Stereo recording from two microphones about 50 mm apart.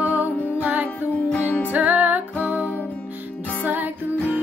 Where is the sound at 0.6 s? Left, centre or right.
Right.